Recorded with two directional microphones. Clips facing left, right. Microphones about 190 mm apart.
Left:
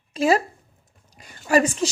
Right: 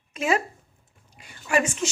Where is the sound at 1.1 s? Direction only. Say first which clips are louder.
Left 5 dB; 40° left (ahead or behind).